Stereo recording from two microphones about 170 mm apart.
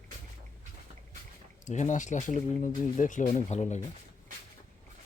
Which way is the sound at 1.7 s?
45° left (ahead or behind).